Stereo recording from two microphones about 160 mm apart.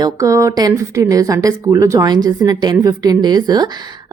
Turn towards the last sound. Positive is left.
turn(degrees=-25)  # may be behind; listen again after turning